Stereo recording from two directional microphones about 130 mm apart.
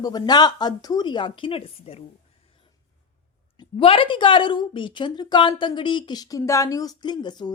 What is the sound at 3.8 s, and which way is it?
Speech, 45° left (ahead or behind).